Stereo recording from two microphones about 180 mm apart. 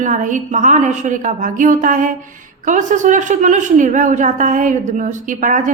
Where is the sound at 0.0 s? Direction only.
45° right (ahead or behind).